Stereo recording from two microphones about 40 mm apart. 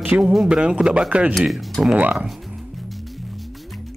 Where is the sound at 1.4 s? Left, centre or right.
Centre.